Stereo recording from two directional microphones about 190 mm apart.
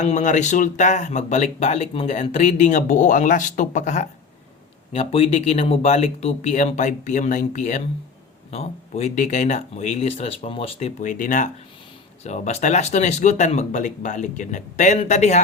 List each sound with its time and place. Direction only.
0.0 s speech: 40° left (ahead or behind)